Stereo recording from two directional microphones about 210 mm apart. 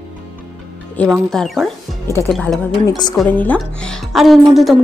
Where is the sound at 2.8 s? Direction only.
20° left (ahead or behind).